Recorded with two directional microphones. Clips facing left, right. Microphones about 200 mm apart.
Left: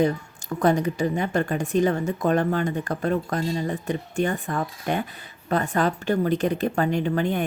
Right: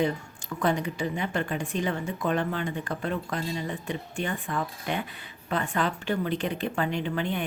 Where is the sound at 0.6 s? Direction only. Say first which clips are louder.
Left 6 dB; 40° left (ahead or behind).